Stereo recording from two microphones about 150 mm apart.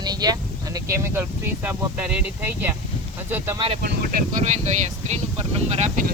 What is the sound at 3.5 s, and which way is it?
Speech, 40° right (ahead or behind).